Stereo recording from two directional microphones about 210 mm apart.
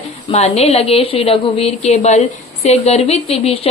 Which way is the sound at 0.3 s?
30° left (ahead or behind).